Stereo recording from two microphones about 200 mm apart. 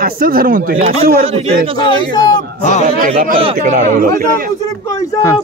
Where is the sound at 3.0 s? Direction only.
45° right (ahead or behind).